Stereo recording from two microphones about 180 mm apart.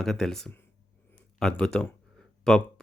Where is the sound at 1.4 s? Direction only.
5° left (ahead or behind).